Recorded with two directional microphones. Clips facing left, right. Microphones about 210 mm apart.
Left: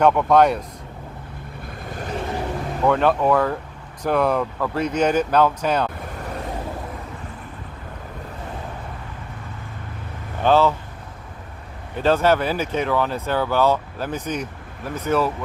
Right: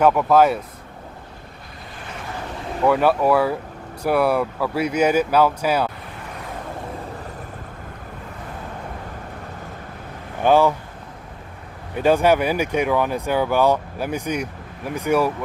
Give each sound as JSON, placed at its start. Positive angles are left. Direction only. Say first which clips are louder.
{"t": 0.0, "sound": "speech", "louder": "even", "side_deg": -5}
{"t": 2.0, "sound": "vehicle", "louder": "left 8 dB", "side_deg": 40}
{"t": 2.8, "sound": "speech", "louder": "right 1 dB", "side_deg": -5}
{"t": 10.4, "sound": "speech", "louder": "right 1 dB", "side_deg": -15}
{"t": 11.9, "sound": "speech", "louder": "right 1 dB", "side_deg": -10}